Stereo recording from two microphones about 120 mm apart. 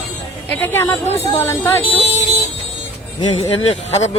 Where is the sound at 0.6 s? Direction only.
20° left (ahead or behind).